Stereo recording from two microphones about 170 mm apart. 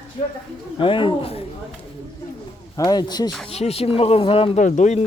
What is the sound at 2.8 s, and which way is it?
Speech, 25° left (ahead or behind).